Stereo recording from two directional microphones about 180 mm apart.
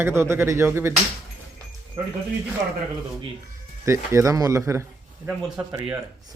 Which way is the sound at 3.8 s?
15° right (ahead or behind).